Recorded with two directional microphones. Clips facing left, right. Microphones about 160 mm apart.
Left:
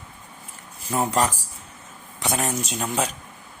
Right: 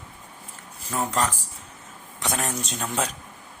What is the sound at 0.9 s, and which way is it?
Speech, 15° left (ahead or behind).